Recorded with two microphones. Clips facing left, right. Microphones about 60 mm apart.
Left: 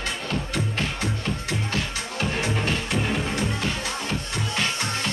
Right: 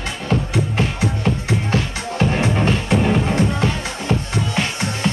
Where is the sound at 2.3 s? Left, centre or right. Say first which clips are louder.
Right 5 dB; right.